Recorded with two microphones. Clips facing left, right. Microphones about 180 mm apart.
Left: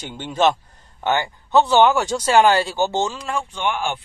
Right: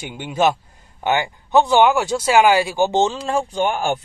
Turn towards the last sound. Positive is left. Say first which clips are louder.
# right 4 dB
turn(degrees=-40)  # may be behind; listen again after turning